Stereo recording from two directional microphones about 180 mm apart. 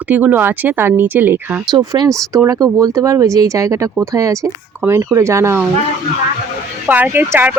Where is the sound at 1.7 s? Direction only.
25° right (ahead or behind).